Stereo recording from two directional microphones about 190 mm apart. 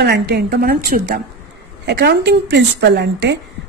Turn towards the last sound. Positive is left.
turn(degrees=-65)  # may be behind; listen again after turning